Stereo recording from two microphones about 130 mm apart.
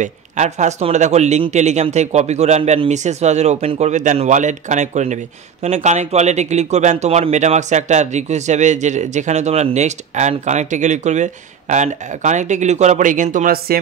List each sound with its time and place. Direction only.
0.0 s speech: 65° right (ahead or behind)
13.7 s speech: 90° right